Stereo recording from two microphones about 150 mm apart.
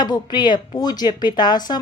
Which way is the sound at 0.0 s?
30° left (ahead or behind).